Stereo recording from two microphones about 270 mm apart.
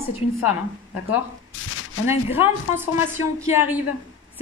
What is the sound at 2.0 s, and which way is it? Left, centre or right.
Speech, centre.